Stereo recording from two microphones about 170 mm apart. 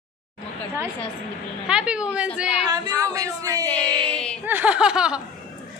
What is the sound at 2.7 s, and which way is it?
Speech, 20° right (ahead or behind).